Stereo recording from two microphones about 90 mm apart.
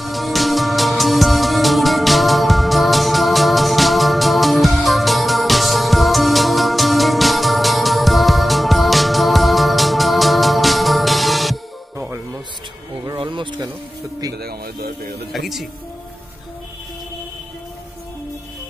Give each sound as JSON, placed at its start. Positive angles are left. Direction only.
{"t": 0.0, "sound": "music", "side_deg": 0}
{"t": 13.2, "sound": "music", "side_deg": -65}
{"t": 15.3, "sound": "music", "side_deg": 0}